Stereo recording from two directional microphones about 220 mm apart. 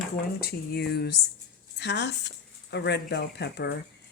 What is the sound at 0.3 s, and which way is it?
Speech, 45° left (ahead or behind).